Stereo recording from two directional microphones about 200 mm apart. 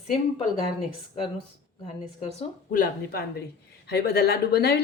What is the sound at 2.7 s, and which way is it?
Speech, 45° left (ahead or behind).